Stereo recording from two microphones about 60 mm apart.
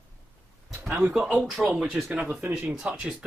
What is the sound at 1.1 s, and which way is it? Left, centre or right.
Speech, centre.